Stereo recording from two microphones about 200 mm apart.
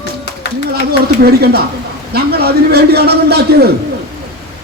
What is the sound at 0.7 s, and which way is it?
A man's voice, 50° right (ahead or behind).